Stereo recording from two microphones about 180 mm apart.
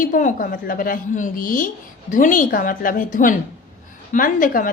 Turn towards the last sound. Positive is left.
turn(degrees=50)  # may be behind; listen again after turning